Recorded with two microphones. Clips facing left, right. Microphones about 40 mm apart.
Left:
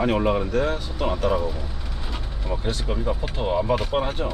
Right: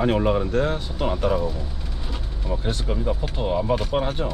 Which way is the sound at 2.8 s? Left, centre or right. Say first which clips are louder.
Even; centre.